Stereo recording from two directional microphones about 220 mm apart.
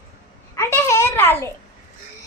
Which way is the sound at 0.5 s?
10° left (ahead or behind).